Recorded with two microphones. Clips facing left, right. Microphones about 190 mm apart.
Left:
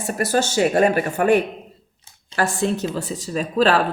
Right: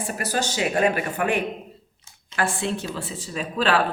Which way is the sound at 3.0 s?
40° left (ahead or behind).